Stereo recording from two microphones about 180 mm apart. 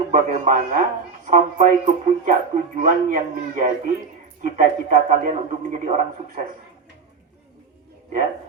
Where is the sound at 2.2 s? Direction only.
45° right (ahead or behind).